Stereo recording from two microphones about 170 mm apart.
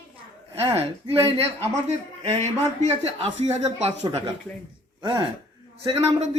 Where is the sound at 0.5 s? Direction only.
35° right (ahead or behind).